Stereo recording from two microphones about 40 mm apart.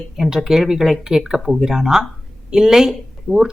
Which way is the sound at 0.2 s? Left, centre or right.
Centre.